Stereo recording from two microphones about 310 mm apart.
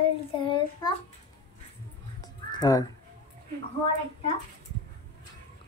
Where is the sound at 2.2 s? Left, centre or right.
Centre.